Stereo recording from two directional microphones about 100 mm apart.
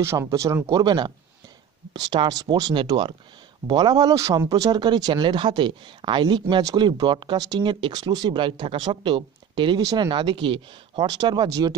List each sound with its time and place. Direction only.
0.0 s speech: 25° right (ahead or behind)
0.7 s speech: 50° right (ahead or behind)
2.7 s speech: 55° right (ahead or behind)
3.6 s speech: 45° right (ahead or behind)
6.6 s speech: 40° right (ahead or behind)
9.8 s speech: 40° right (ahead or behind)
10.0 s speech: 50° right (ahead or behind)